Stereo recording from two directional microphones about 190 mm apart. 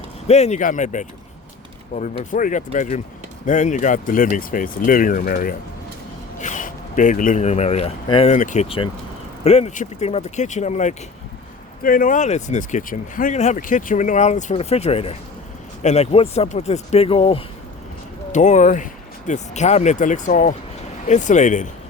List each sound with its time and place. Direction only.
0.3 s speech: 35° left (ahead or behind)
8.6 s speech: 30° left (ahead or behind)